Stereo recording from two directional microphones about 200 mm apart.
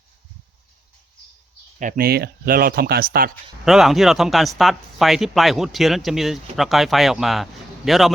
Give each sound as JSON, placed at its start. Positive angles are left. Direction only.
{"t": 1.8, "sound": "speech", "side_deg": -45}
{"t": 3.7, "sound": "speech", "side_deg": 0}